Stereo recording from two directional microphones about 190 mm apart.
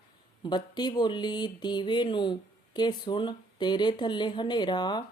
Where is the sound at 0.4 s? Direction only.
20° left (ahead or behind).